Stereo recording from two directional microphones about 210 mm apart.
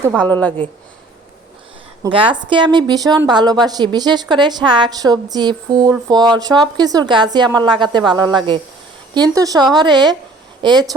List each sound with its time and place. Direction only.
0.2 s a woman's voice: 5° left (ahead or behind)
2.1 s a woman's voice: 25° right (ahead or behind)